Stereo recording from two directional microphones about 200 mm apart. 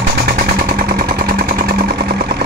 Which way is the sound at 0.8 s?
50° right (ahead or behind).